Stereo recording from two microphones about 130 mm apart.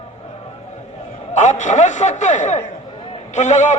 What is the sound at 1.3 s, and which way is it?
A man's voice, 65° left (ahead or behind).